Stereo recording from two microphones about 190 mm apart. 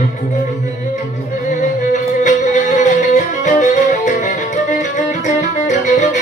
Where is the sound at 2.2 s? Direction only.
40° left (ahead or behind).